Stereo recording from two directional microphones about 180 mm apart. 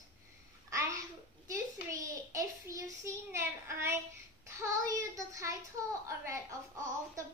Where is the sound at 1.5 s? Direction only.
20° right (ahead or behind).